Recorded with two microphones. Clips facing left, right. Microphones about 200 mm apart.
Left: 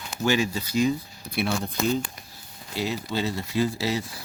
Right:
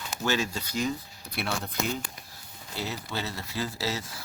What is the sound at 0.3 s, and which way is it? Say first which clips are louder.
Speech: left 5 dB; 10° left (ahead or behind).